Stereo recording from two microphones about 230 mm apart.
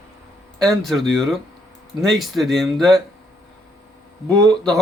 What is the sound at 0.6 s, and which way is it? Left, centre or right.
Speech, centre.